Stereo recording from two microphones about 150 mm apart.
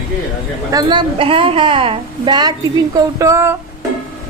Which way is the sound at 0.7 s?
25° right (ahead or behind).